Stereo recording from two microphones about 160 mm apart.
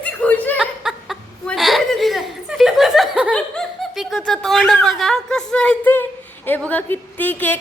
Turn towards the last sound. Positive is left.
turn(degrees=10)  # may be behind; listen again after turning